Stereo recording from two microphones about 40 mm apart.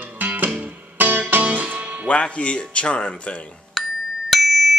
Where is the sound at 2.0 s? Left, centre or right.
Left.